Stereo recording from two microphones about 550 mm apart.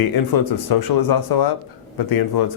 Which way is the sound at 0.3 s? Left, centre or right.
Left.